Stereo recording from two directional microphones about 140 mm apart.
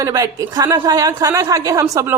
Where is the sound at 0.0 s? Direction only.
25° right (ahead or behind).